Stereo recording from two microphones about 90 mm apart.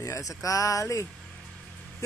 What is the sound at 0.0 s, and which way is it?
Speech, 35° left (ahead or behind).